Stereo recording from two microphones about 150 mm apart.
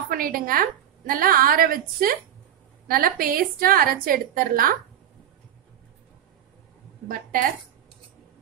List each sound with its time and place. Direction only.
0.1 s a woman's voice: 75° right (ahead or behind)